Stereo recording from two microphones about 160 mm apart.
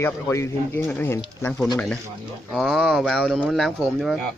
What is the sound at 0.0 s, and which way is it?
Speech, 15° left (ahead or behind).